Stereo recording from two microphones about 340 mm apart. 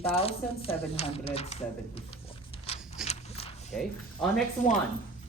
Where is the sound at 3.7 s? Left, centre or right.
Centre.